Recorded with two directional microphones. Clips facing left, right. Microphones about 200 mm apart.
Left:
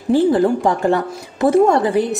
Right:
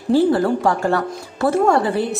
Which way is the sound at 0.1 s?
15° left (ahead or behind).